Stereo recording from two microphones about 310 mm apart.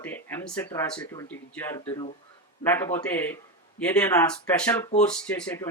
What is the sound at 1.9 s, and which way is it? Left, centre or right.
Speech, centre.